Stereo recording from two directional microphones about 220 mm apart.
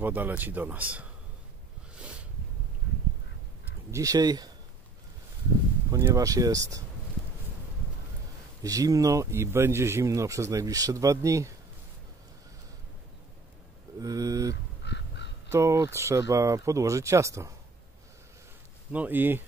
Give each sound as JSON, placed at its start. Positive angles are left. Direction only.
{"t": 0.0, "sound": "speech", "side_deg": -10}
{"t": 2.0, "sound": "a sound", "side_deg": -5}
{"t": 3.9, "sound": "speech", "side_deg": -15}
{"t": 5.9, "sound": "speech", "side_deg": -15}
{"t": 8.6, "sound": "speech", "side_deg": -15}
{"t": 14.0, "sound": "speech", "side_deg": -15}
{"t": 14.5, "sound": "fowl", "side_deg": 50}
{"t": 15.5, "sound": "speech", "side_deg": -15}
{"t": 18.9, "sound": "speech", "side_deg": -10}